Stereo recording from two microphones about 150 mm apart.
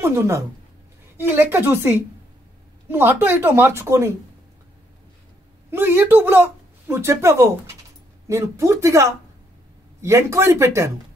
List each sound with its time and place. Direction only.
0.0 s speech: 15° right (ahead or behind)
5.7 s speech: 15° right (ahead or behind)